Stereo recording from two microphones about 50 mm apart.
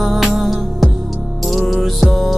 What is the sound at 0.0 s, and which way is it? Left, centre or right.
Music, centre.